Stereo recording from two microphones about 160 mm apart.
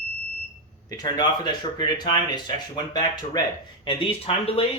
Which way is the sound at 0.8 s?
25° left (ahead or behind).